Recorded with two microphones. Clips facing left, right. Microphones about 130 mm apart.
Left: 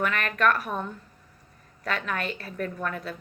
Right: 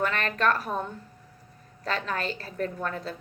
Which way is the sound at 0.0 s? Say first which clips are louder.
Left 1 dB; 30° right (ahead or behind).